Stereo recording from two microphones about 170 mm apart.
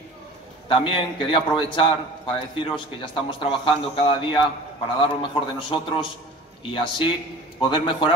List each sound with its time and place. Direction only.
0.7 s a man's voice: 30° left (ahead or behind)